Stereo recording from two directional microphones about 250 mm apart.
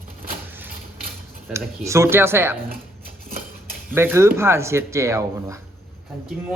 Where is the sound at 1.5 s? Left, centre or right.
Centre.